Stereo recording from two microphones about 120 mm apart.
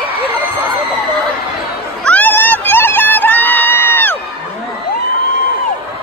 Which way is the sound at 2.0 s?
15° left (ahead or behind).